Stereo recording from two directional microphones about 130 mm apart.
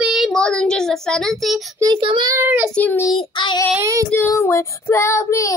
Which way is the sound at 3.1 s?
40° left (ahead or behind).